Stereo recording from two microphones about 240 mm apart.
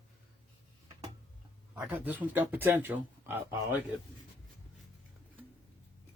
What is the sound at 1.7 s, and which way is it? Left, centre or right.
Speech, centre.